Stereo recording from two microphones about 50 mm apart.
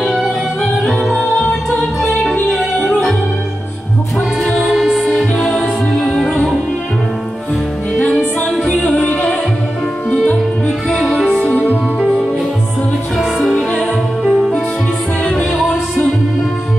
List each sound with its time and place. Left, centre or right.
0.6 s music: centre
4.4 s music: centre
8.5 s music: centre
8.9 s music: left
10.9 s music: centre
11.3 s music: left
13.4 s music: centre
15.5 s music: centre